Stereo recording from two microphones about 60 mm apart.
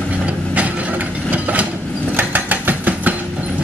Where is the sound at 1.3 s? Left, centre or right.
Right.